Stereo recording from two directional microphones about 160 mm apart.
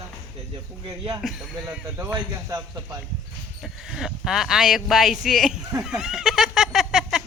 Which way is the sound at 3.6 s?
5° right (ahead or behind).